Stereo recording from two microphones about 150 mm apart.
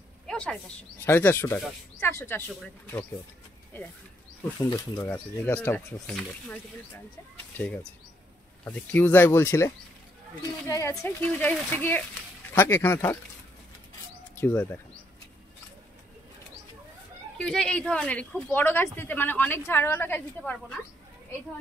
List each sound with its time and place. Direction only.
0.3 s a sound: 5° left (ahead or behind)
1.0 s speech: 15° left (ahead or behind)
4.6 s speech: 25° left (ahead or behind)
10.7 s a woman's voice: 20° left (ahead or behind)
14.3 s speech: 15° left (ahead or behind)
17.4 s speech: 5° left (ahead or behind)